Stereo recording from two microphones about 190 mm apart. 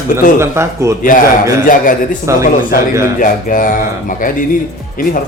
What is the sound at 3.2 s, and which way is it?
Speech, 45° left (ahead or behind).